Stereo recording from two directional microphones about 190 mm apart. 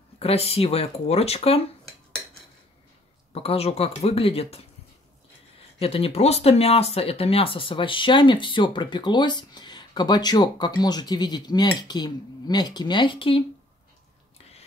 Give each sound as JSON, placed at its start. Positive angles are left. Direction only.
{"t": 0.2, "sound": "speech", "side_deg": 30}
{"t": 3.3, "sound": "speech", "side_deg": 30}
{"t": 5.8, "sound": "speech", "side_deg": 30}